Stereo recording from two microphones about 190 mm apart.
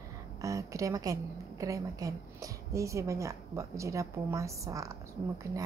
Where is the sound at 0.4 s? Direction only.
15° right (ahead or behind).